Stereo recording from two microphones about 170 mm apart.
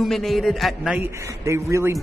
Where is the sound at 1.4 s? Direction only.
15° right (ahead or behind).